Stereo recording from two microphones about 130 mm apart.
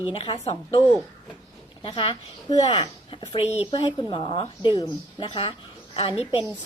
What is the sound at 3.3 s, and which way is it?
Speech, 55° left (ahead or behind).